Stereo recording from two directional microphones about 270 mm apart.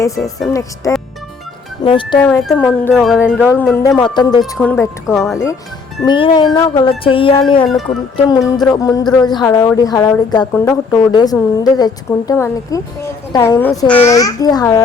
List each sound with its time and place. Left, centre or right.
0.2 s speech: centre
1.8 s a woman's voice: centre
2.2 s a woman's voice: centre
6.1 s music: centre
7.7 s speech: centre
8.1 s a woman's voice: centre